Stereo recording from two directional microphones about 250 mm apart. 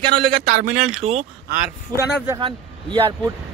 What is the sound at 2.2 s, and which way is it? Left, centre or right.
Speech, centre.